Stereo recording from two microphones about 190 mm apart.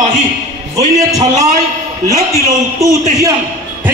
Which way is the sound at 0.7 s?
20° right (ahead or behind).